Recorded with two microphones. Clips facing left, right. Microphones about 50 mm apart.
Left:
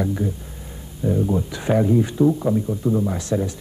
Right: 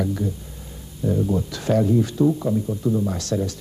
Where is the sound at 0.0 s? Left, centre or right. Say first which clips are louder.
Left 1 dB; left.